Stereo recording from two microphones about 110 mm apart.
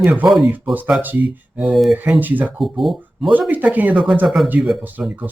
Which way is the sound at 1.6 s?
Centre (ahead or behind).